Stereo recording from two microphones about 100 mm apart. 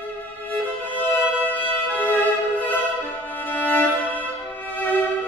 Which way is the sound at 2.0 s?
20° left (ahead or behind).